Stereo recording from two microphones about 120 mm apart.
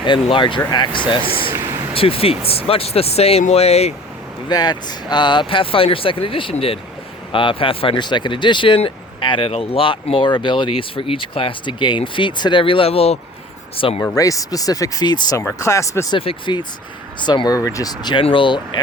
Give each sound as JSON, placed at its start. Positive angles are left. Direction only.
{"t": 0.0, "sound": "speech", "side_deg": 40}
{"t": 4.4, "sound": "speech", "side_deg": 35}
{"t": 14.2, "sound": "speech", "side_deg": 30}
{"t": 16.1, "sound": "speech", "side_deg": 45}